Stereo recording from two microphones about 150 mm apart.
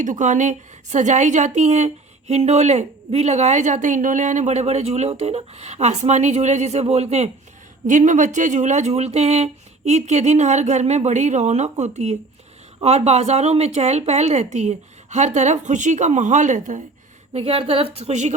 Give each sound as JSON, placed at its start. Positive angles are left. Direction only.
{"t": 0.0, "sound": "a woman's voice", "side_deg": -55}
{"t": 7.9, "sound": "a woman's voice", "side_deg": -55}
{"t": 17.3, "sound": "a woman's voice", "side_deg": -40}